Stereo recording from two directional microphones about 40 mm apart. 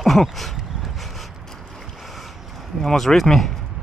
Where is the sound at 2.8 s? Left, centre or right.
Centre.